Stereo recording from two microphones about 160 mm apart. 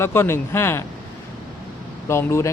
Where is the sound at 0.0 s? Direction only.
15° left (ahead or behind).